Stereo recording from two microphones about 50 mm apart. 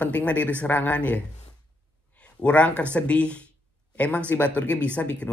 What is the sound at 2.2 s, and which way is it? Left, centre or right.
Speech, left.